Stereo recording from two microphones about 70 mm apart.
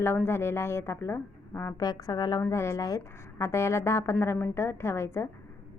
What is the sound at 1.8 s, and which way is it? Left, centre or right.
Speech, left.